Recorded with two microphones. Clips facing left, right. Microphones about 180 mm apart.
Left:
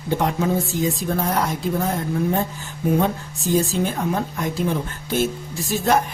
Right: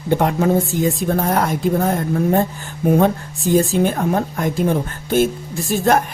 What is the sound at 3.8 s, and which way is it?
Speech, 55° right (ahead or behind).